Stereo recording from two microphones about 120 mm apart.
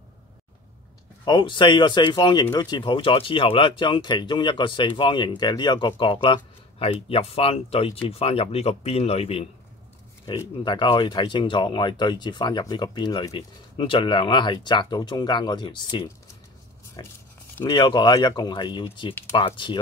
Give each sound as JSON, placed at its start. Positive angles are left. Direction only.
{"t": 1.2, "sound": "speech", "side_deg": 40}
{"t": 10.3, "sound": "speech", "side_deg": 45}